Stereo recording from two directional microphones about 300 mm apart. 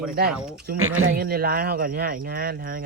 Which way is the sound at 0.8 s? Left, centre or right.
Right.